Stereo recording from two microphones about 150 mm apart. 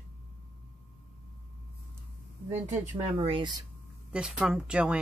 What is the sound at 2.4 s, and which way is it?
Speech, 45° right (ahead or behind).